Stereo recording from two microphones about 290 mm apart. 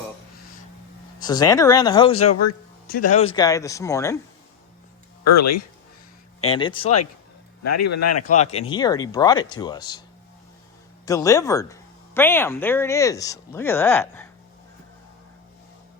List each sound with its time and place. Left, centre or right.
1.2 s speech: centre
2.4 s speech: left
3.2 s speech: centre
5.2 s speech: left
6.4 s speech: centre
7.6 s speech: left
8.3 s speech: left
11.0 s speech: centre